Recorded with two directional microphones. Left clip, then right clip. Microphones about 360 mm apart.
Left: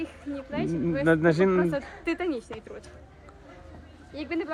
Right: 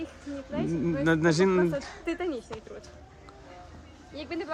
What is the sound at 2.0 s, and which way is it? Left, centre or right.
Speech, left.